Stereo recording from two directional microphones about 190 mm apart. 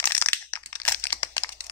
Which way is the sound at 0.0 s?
10° left (ahead or behind).